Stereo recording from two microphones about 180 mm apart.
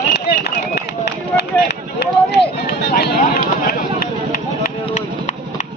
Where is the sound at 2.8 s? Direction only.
65° left (ahead or behind).